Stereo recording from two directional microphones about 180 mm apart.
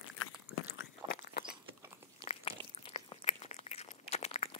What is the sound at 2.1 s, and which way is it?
Chewing, 30° left (ahead or behind).